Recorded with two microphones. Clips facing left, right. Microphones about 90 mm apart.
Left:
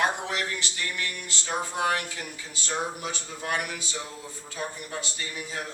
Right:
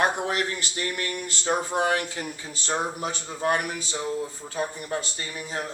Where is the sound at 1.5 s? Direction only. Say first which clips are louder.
Right 3 dB; 30° right (ahead or behind).